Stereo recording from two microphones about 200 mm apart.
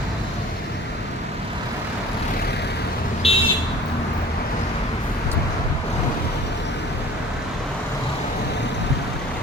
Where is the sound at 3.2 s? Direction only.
30° left (ahead or behind).